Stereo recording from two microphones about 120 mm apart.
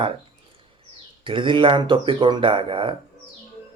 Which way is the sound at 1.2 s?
45° right (ahead or behind).